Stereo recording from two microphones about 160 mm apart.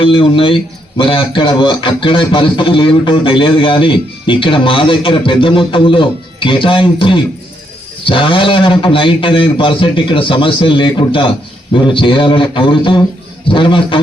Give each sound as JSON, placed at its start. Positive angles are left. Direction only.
{"t": 0.0, "sound": "a man's voice", "side_deg": 35}